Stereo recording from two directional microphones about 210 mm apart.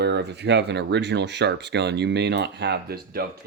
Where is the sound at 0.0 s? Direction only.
50° right (ahead or behind).